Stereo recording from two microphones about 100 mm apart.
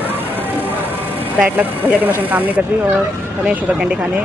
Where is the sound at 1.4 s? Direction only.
15° right (ahead or behind).